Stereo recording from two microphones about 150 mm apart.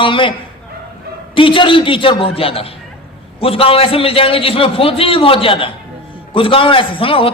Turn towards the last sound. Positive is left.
turn(degrees=35)  # may be behind; listen again after turning